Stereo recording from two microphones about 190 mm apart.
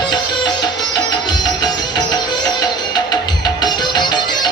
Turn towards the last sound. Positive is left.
turn(degrees=20)  # may be behind; listen again after turning